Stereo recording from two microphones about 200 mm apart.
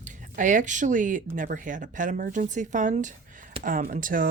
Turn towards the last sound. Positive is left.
turn(degrees=-45)  # may be behind; listen again after turning